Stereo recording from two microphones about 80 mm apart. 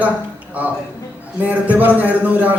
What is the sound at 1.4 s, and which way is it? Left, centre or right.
Speech, right.